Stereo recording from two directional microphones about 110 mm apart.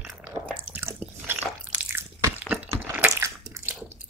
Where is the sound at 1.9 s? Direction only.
15° right (ahead or behind).